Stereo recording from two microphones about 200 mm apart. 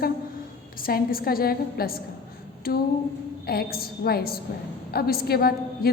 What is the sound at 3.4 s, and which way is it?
A woman's voice, 50° left (ahead or behind).